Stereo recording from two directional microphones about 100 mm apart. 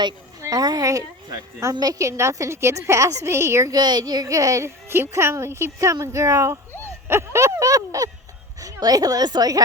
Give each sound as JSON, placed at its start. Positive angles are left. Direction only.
{"t": 0.4, "sound": "a woman's voice", "side_deg": -40}
{"t": 3.8, "sound": "a woman's voice", "side_deg": -45}